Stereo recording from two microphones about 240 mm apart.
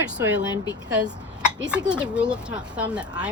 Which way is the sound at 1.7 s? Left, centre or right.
Centre.